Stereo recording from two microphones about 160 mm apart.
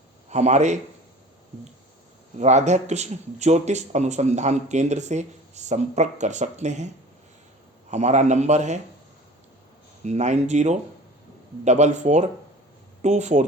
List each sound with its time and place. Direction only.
0.3 s speech: 45° right (ahead or behind)
2.4 s speech: 45° right (ahead or behind)
10.0 s speech: 45° right (ahead or behind)